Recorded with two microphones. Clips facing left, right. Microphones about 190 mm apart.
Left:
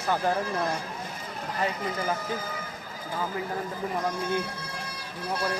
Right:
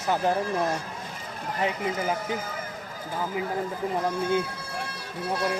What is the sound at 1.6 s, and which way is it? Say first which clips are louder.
Speech: right 2 dB; 15° right (ahead or behind).